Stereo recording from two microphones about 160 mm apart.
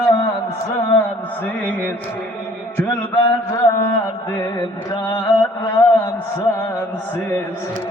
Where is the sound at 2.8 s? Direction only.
15° left (ahead or behind).